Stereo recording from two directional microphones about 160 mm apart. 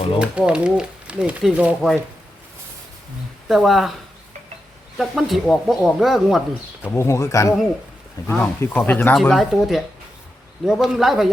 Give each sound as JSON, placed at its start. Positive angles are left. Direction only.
{"t": 0.2, "sound": "speech", "side_deg": -5}
{"t": 3.5, "sound": "speech", "side_deg": 0}
{"t": 4.9, "sound": "speech", "side_deg": 0}
{"t": 6.8, "sound": "speech", "side_deg": 15}
{"t": 9.2, "sound": "speech", "side_deg": 0}